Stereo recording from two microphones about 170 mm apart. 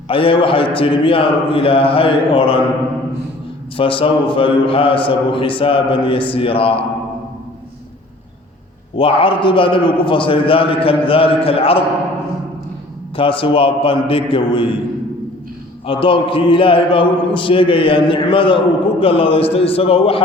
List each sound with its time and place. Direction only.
0.1 s a man's voice: 30° left (ahead or behind)
3.8 s a man's voice: 30° left (ahead or behind)
9.0 s a man's voice: 30° left (ahead or behind)
13.1 s a man's voice: 30° left (ahead or behind)
15.9 s a man's voice: 30° left (ahead or behind)